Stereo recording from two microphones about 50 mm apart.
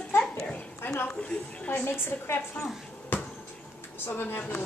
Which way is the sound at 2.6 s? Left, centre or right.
Left.